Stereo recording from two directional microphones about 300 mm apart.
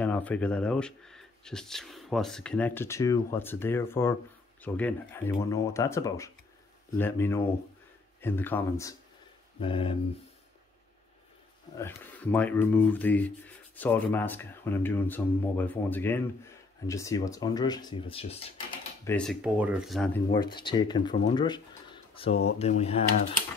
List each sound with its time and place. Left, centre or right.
0.0 s speech: centre
11.8 s speech: centre
19.0 s speech: centre
20.3 s speech: centre